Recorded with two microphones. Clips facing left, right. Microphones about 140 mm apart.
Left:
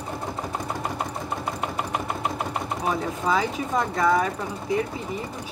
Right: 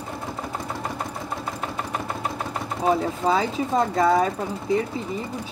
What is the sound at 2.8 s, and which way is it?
Speech, 30° right (ahead or behind).